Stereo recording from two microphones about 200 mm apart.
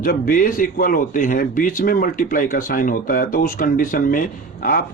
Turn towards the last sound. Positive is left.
turn(degrees=45)  # may be behind; listen again after turning